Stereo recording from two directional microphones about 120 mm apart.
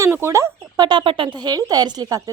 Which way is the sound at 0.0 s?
20° right (ahead or behind).